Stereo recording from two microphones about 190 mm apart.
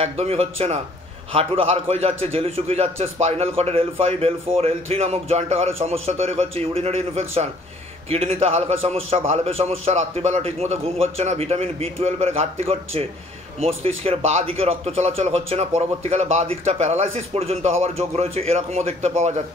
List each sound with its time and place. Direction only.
0.0 s speech: 35° right (ahead or behind)